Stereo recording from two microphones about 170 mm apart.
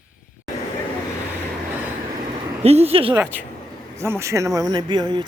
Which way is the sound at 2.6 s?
35° right (ahead or behind).